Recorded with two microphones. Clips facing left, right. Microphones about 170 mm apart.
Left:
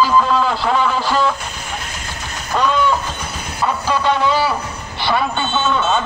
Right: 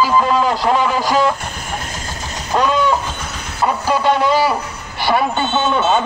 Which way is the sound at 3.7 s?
10° right (ahead or behind).